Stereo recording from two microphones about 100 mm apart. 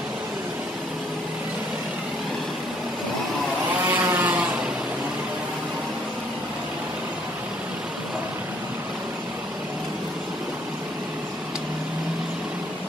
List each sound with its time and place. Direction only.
3.9 s vehicle: 20° right (ahead or behind)